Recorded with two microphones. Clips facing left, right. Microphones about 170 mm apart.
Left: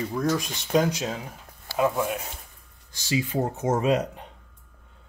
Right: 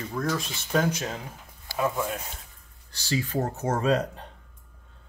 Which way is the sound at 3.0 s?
10° left (ahead or behind).